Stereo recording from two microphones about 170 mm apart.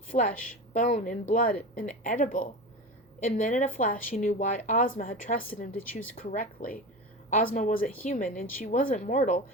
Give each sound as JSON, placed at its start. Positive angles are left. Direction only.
{"t": 0.1, "sound": "a woman's voice", "side_deg": 50}